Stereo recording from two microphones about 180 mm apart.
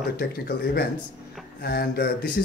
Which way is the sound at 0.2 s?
60° left (ahead or behind).